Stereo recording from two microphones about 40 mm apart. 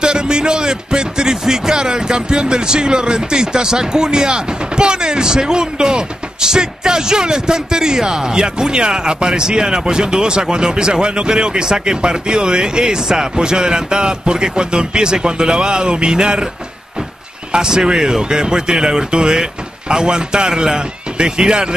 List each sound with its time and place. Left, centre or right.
0.0 s speech: right
17.5 s speech: centre